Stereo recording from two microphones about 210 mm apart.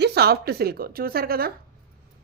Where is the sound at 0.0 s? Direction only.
50° right (ahead or behind).